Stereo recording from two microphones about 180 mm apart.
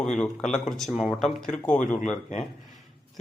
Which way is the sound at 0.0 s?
5° left (ahead or behind).